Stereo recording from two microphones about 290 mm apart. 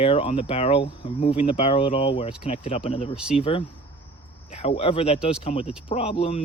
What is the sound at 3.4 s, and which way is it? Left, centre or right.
Speech, centre.